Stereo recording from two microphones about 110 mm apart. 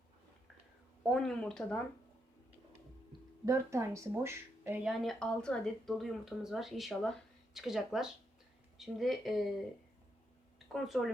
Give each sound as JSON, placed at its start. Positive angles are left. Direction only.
{"t": 1.1, "sound": "speech", "side_deg": 5}
{"t": 3.4, "sound": "speech", "side_deg": -25}
{"t": 4.8, "sound": "speech", "side_deg": 0}
{"t": 10.7, "sound": "speech", "side_deg": 0}